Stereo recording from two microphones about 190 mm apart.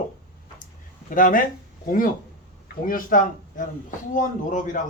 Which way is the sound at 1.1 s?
45° left (ahead or behind).